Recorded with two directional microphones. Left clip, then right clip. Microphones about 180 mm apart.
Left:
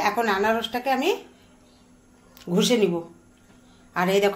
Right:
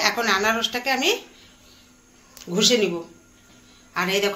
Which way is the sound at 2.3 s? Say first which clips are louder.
Right 3 dB; 55° left (ahead or behind).